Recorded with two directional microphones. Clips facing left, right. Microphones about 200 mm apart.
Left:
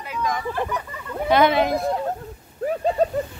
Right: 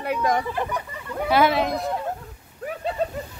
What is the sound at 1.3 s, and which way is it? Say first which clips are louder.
Speech: left 3 dB; 5° right (ahead or behind).